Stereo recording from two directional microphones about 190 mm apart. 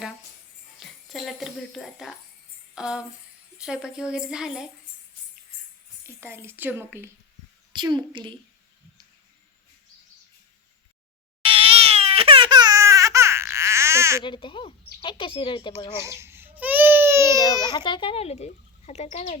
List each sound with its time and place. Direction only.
0.8 s speech: centre (ahead or behind)
2.7 s tambourine: 5° right (ahead or behind)
3.6 s a woman's voice: 5° right (ahead or behind)
6.1 s speech: 10° right (ahead or behind)
7.7 s a child's voice: 20° right (ahead or behind)
11.4 s baby cry: 30° right (ahead or behind)
14.3 s speech: 25° left (ahead or behind)
16.0 s baby cry: 15° right (ahead or behind)
17.3 s speech: 20° left (ahead or behind); by 19.4 s 35° left (ahead or behind)